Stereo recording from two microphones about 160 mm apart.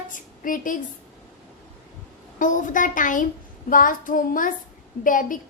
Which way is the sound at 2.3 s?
55° left (ahead or behind).